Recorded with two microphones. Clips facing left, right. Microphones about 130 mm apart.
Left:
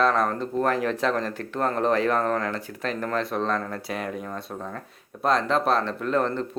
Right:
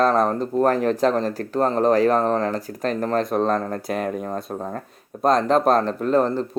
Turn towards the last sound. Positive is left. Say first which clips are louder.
# right 5 dB
turn(degrees=-35)  # may be behind; listen again after turning